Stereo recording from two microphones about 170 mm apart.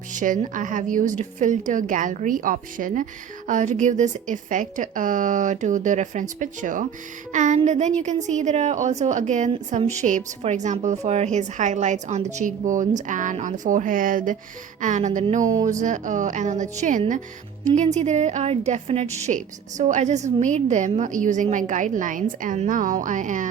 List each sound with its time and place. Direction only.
0.1 s a woman's voice: 50° right (ahead or behind)